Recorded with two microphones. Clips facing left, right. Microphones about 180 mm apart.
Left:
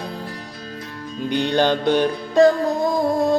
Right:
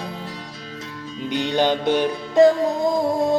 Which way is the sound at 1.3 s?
20° right (ahead or behind).